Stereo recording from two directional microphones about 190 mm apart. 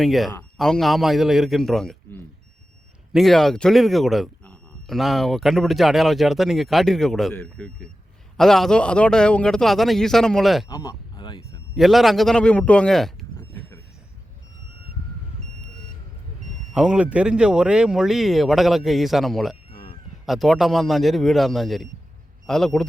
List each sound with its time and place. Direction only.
0.0 s speech: centre (ahead or behind)
3.1 s speech: centre (ahead or behind)
10.7 s a sound: 15° left (ahead or behind)
11.7 s speech: centre (ahead or behind)
16.7 s speech: 5° right (ahead or behind)